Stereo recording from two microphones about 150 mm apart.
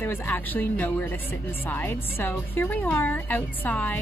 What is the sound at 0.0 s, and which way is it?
A woman's voice, 10° left (ahead or behind).